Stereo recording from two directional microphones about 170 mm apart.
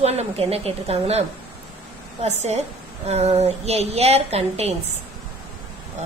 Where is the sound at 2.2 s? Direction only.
40° right (ahead or behind).